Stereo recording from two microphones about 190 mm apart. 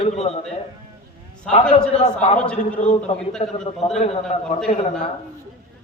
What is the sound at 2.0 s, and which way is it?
A man's voice, 35° left (ahead or behind).